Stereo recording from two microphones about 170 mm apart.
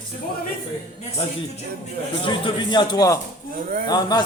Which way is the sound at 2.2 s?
30° left (ahead or behind).